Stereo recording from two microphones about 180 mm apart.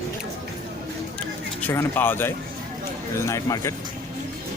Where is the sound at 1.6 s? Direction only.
10° left (ahead or behind).